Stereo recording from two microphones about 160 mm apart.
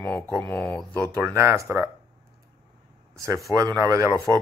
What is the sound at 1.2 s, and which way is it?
Speech, 15° right (ahead or behind).